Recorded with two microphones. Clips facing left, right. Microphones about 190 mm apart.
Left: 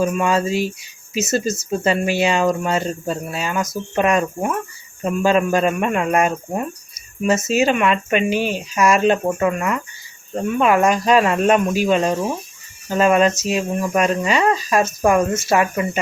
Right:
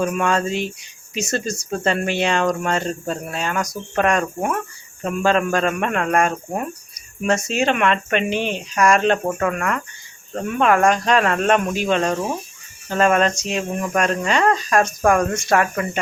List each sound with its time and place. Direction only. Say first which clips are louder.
0.0 s speech: left 2 dB; 5° left (ahead or behind)